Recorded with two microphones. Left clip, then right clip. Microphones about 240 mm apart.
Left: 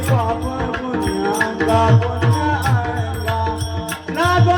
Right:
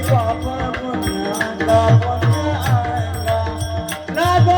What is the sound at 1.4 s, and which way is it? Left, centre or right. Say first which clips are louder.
Music: right 2 dB; right.